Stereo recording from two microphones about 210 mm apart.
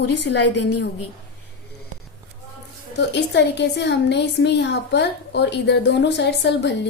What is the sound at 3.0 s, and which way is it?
A woman's voice, 55° left (ahead or behind).